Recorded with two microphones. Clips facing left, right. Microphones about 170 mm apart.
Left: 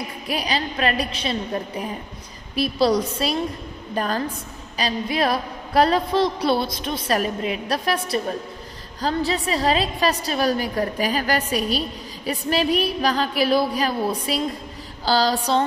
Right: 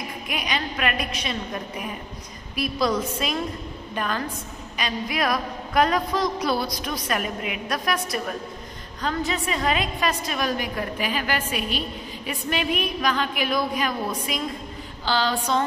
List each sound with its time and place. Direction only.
0.3 s a woman's voice: 35° left (ahead or behind)